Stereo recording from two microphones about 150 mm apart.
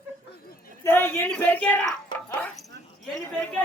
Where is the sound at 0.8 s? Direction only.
15° left (ahead or behind).